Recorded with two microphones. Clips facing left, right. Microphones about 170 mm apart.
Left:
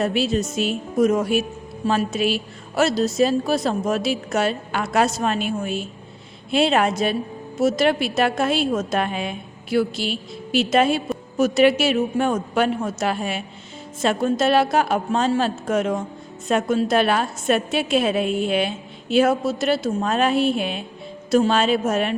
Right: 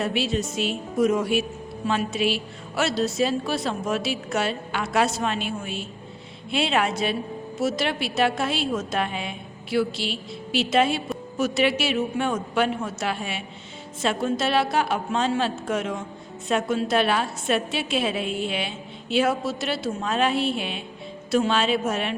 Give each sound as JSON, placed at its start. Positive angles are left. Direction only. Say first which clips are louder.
{"t": 0.0, "sound": "a woman's voice", "louder": "left 4 dB", "side_deg": 40}